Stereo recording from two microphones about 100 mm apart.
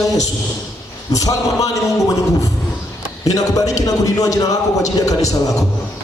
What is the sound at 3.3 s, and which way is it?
A man's voice, 35° left (ahead or behind).